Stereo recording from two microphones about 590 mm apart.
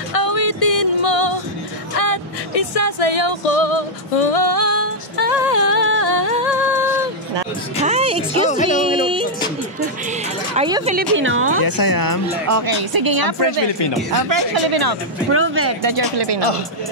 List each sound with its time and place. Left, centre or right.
0.1 s music: left
4.8 s music: left
7.8 s music: centre
8.5 s music: centre
10.5 s speech: centre
11.6 s speech: left
12.4 s a woman's voice: right
14.3 s a woman's voice: right
15.3 s speech: right
15.8 s a woman's voice: right